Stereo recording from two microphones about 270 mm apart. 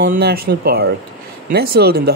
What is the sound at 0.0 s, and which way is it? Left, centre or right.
Speech, right.